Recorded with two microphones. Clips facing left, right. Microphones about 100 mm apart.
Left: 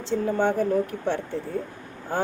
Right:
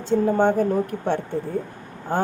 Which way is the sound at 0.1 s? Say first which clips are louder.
Right 6 dB; 35° right (ahead or behind).